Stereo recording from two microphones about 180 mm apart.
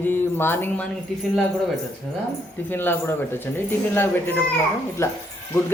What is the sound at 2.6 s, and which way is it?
Speech, 10° left (ahead or behind).